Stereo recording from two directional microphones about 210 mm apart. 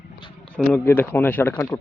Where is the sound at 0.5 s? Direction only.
5° left (ahead or behind).